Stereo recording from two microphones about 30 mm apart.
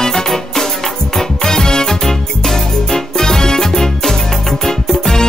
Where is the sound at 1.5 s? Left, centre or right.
Centre.